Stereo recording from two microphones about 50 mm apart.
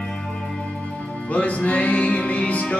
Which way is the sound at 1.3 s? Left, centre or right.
Left.